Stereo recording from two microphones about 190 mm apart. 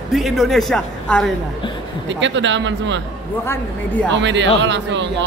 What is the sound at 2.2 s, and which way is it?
Speech, 75° right (ahead or behind).